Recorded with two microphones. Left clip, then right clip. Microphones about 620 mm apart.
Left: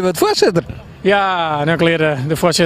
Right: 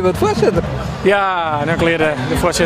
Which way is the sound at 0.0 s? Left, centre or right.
Left.